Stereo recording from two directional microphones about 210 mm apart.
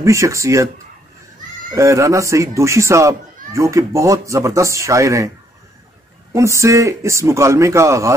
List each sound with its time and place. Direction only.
0.0 s speech: 15° right (ahead or behind)
1.8 s speech: 15° right (ahead or behind)
6.3 s speech: 15° right (ahead or behind)